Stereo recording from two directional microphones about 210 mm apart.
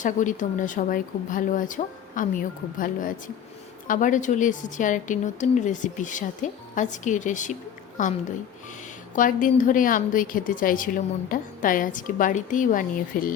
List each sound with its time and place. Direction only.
0.0 s a woman's voice: 35° left (ahead or behind)